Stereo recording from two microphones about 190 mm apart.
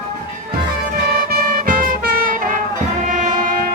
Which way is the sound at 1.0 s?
55° right (ahead or behind).